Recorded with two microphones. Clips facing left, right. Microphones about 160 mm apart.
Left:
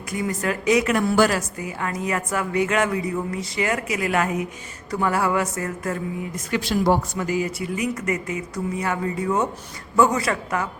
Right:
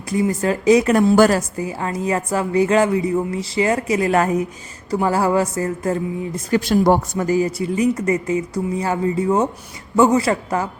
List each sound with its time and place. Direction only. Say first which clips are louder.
0.1 s speech: right 6 dB; 30° right (ahead or behind)